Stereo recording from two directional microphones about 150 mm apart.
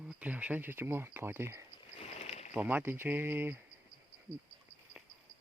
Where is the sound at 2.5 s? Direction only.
10° right (ahead or behind).